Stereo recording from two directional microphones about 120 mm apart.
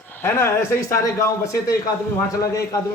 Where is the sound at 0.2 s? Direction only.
20° left (ahead or behind).